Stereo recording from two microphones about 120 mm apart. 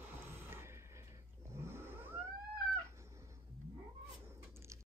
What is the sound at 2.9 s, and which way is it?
Cat, 25° right (ahead or behind).